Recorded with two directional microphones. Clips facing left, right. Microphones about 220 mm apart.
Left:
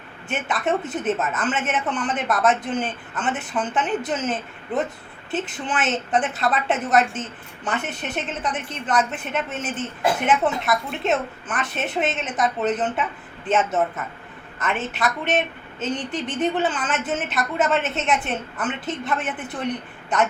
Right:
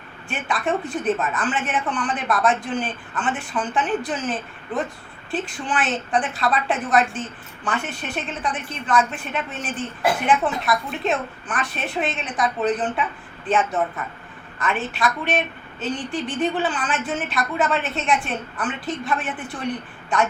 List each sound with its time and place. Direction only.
0.3 s a woman's voice: 20° left (ahead or behind)